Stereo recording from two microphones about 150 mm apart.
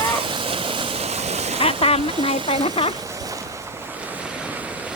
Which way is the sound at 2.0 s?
35° right (ahead or behind).